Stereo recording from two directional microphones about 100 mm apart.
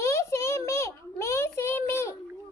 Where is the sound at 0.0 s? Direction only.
30° left (ahead or behind).